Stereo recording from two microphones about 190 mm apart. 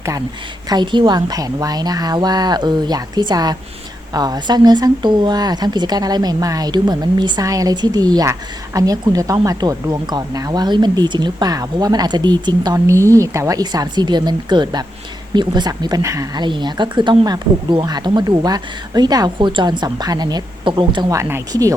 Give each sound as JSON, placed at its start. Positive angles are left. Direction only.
{"t": 0.7, "sound": "speech", "side_deg": -25}